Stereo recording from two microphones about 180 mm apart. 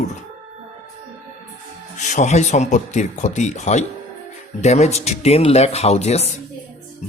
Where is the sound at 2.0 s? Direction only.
40° left (ahead or behind).